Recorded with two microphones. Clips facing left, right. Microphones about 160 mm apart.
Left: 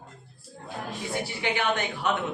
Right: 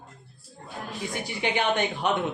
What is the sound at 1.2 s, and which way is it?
Speech, 20° right (ahead or behind).